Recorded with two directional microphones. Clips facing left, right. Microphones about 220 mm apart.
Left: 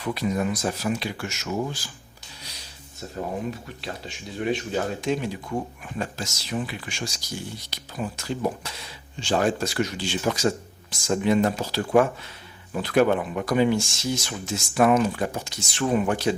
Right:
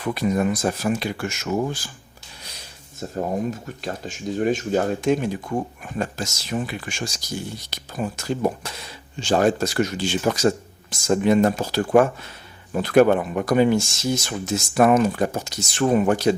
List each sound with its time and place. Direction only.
0.0 s speech: 50° right (ahead or behind)
3.2 s speech: 45° right (ahead or behind)